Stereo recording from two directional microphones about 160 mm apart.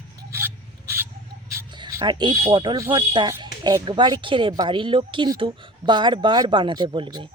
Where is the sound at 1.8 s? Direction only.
25° right (ahead or behind).